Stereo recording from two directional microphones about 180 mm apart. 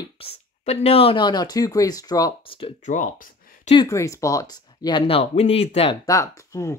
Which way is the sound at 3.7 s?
15° left (ahead or behind).